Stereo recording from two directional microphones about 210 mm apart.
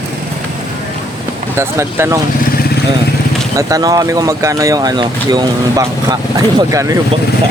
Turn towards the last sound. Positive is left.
turn(degrees=-15)  # may be behind; listen again after turning